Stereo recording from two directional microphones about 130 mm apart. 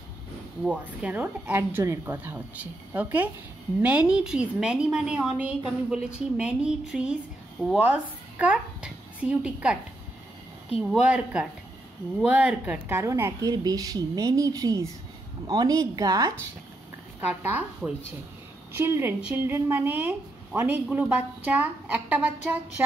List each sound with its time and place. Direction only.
0.7 s speech: 10° right (ahead or behind)
10.9 s a woman's voice: 10° right (ahead or behind); by 16.3 s 25° right (ahead or behind)
17.3 s speech: 15° right (ahead or behind)